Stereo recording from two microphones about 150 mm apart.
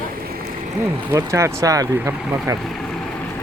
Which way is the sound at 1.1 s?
20° right (ahead or behind).